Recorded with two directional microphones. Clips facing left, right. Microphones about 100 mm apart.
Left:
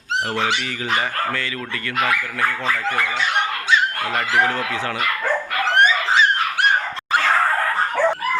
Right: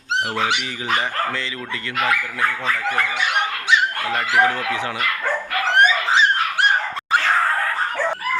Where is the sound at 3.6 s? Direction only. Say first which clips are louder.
Right 2 dB; 15° right (ahead or behind).